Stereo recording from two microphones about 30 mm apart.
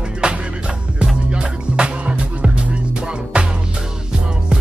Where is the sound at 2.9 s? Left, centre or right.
Right.